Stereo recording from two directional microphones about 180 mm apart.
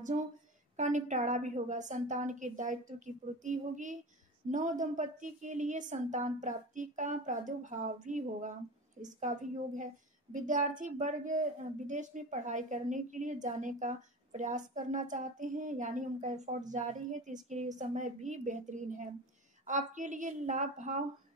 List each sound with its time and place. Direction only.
0.1 s a woman's voice: 40° right (ahead or behind)